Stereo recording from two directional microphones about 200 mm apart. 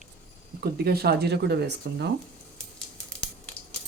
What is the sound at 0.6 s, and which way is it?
Speech, 50° right (ahead or behind).